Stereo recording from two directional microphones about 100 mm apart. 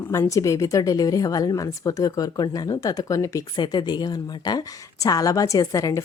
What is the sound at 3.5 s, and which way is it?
Speech, 50° left (ahead or behind).